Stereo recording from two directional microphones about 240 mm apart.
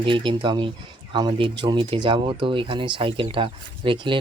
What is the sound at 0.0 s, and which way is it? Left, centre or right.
Speech, right.